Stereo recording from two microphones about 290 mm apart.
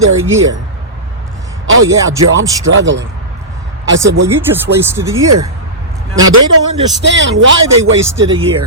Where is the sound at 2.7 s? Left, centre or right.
Right.